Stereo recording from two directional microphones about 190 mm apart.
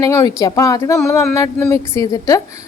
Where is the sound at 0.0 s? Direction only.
15° left (ahead or behind).